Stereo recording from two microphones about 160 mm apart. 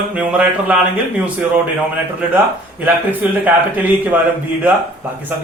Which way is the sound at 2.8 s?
10° right (ahead or behind).